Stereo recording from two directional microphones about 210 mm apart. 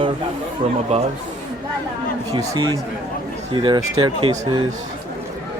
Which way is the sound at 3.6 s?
20° right (ahead or behind).